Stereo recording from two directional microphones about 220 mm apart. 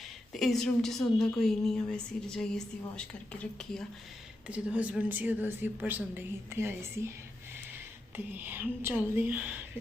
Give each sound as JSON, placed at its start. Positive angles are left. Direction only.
{"t": 0.3, "sound": "a woman's voice", "side_deg": 0}
{"t": 8.1, "sound": "a woman's voice", "side_deg": -10}